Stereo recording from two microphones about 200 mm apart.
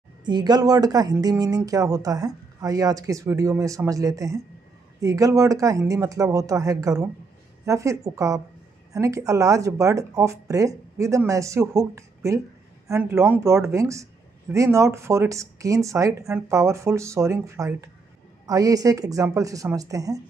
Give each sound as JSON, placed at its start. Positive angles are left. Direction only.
{"t": 0.2, "sound": "speech", "side_deg": -20}